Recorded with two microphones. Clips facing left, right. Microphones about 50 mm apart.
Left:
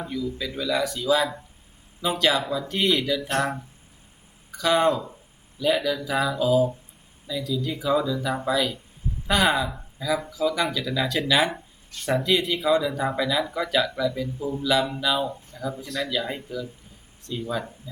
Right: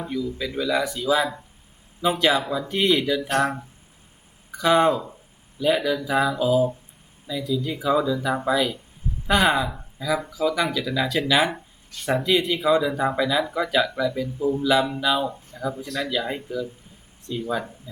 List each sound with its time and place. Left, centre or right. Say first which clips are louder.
0.0 s speech: right 2 dB; centre
2.7 s speech: right 3 dB; centre
4.8 s speech: right 2 dB; centre